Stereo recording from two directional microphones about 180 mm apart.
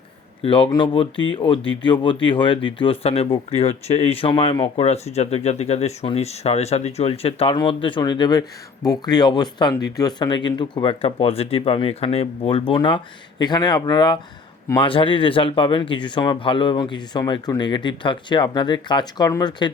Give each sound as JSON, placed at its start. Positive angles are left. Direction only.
{"t": 0.4, "sound": "speech", "side_deg": 30}